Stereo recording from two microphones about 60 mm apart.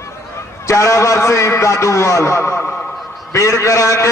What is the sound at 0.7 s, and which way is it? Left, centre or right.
A man's voice, left.